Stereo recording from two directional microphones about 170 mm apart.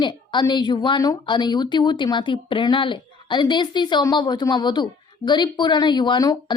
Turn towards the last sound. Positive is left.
turn(degrees=25)  # may be behind; listen again after turning